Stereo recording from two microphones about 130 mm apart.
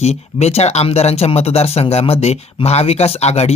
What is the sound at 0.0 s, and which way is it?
Speech, 55° left (ahead or behind).